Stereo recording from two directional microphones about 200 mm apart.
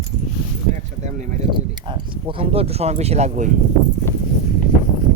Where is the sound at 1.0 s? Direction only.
35° right (ahead or behind).